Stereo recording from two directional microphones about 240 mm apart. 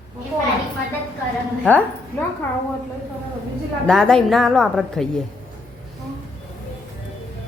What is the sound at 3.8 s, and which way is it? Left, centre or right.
A woman's voice, centre.